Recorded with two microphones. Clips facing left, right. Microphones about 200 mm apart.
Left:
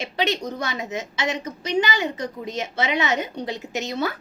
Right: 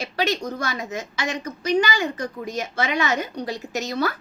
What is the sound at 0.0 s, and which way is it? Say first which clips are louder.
A woman's voice: even; 20° left (ahead or behind).